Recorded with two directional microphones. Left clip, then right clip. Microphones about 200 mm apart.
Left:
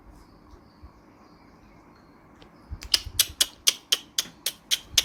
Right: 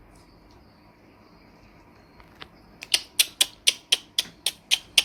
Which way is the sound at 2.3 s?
15° left (ahead or behind).